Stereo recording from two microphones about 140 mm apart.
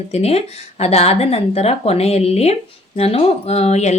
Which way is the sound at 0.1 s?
50° left (ahead or behind).